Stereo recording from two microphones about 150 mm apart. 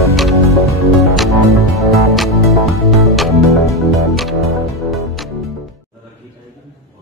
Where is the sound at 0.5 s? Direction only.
20° left (ahead or behind).